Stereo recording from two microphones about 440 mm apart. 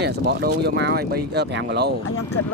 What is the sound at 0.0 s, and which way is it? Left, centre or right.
Speech, right.